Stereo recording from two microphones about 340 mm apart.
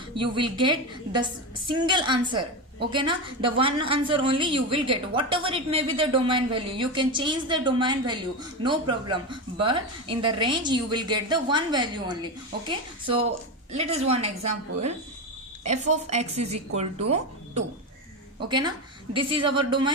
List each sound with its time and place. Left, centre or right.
0.1 s a woman's voice: centre
15.6 s a woman's voice: centre